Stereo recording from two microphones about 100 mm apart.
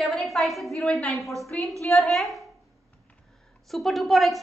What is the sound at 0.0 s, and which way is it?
A woman's voice, centre (ahead or behind).